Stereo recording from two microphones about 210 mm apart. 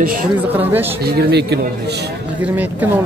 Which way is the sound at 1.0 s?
50° right (ahead or behind).